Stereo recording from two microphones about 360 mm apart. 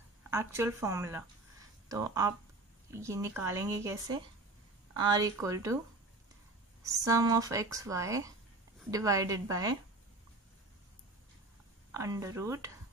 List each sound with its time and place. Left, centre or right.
0.3 s speech: centre
6.8 s speech: centre
11.9 s speech: centre